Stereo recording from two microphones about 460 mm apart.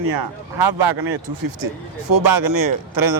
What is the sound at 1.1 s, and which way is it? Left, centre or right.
Speech, right.